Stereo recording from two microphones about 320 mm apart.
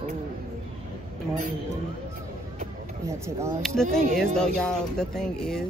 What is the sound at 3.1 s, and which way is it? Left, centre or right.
Speech, centre.